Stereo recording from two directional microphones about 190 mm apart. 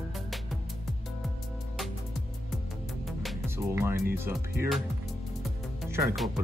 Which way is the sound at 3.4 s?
10° right (ahead or behind).